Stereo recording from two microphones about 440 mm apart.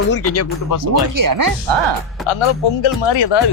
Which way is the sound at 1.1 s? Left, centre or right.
Right.